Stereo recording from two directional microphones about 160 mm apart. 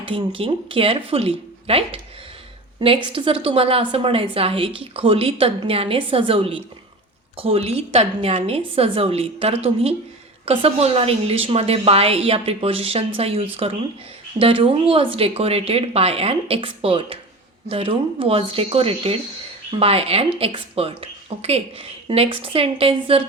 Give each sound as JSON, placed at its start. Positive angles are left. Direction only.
{"t": 0.0, "sound": "a woman's voice", "side_deg": -35}